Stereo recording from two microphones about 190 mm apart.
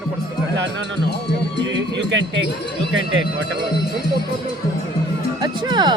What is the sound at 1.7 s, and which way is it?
Speech, 75° right (ahead or behind).